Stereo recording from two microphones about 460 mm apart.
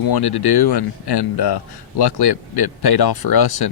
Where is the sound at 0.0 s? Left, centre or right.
Left.